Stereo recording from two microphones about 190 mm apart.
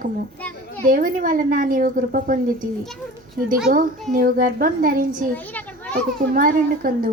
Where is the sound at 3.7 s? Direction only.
35° right (ahead or behind).